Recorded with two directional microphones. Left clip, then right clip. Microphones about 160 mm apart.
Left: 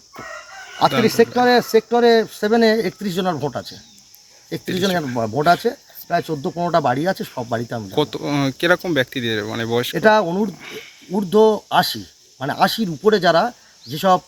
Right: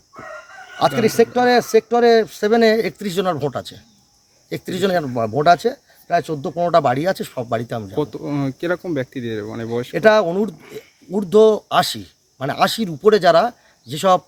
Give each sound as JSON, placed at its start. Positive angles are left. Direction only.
{"t": 1.1, "sound": "speech", "side_deg": -20}
{"t": 7.9, "sound": "speech", "side_deg": 0}
{"t": 9.9, "sound": "speech", "side_deg": -25}
{"t": 10.6, "sound": "speech", "side_deg": 0}
{"t": 11.1, "sound": "speech", "side_deg": -30}